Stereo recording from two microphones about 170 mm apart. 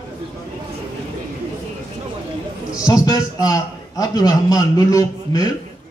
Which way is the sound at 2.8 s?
20° left (ahead or behind).